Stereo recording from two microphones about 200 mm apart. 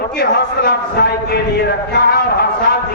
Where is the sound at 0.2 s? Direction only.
55° left (ahead or behind).